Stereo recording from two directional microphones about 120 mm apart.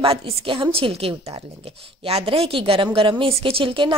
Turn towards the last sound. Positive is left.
turn(degrees=-45)  # may be behind; listen again after turning